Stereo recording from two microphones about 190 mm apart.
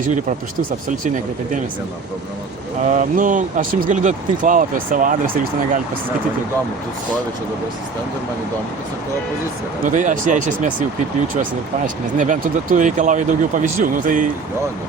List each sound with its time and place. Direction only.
0.9 s speech: 45° right (ahead or behind)
2.8 s speech: 40° right (ahead or behind)
9.8 s speech: 40° right (ahead or behind)
12.1 s speech: 45° right (ahead or behind)